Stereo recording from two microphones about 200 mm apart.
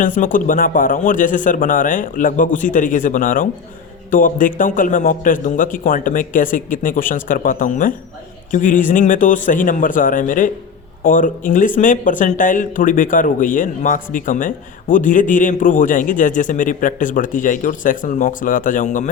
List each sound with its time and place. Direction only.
0.0 s a man's voice: 40° left (ahead or behind)